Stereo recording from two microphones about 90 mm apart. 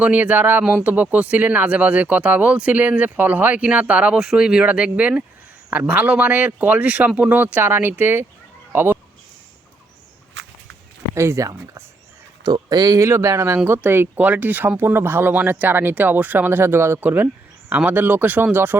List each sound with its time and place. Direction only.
0.0 s speech: 15° right (ahead or behind)
11.1 s speech: 30° right (ahead or behind)
12.4 s speech: 50° right (ahead or behind)
13.0 s speech: 30° right (ahead or behind)